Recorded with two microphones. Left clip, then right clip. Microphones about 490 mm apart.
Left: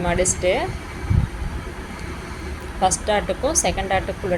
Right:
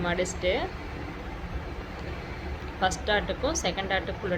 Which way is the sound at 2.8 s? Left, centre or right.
Right.